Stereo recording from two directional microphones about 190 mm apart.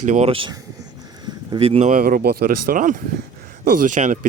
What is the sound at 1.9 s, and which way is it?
Speech, 50° right (ahead or behind).